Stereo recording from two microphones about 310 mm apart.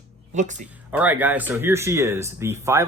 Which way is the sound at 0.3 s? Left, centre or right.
Right.